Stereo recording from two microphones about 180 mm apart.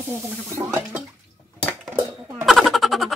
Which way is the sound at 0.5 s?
15° right (ahead or behind).